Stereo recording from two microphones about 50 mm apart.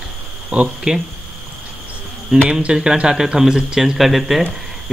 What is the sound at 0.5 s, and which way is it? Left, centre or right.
Speech, centre.